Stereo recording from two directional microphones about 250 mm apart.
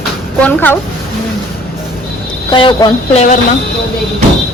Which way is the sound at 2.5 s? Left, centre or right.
Centre.